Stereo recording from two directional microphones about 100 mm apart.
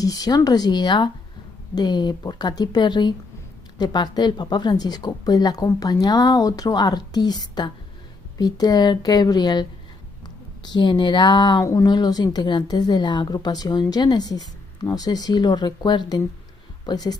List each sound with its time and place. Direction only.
0.0 s a woman's voice: 40° left (ahead or behind)
11.6 s a woman's voice: 40° left (ahead or behind)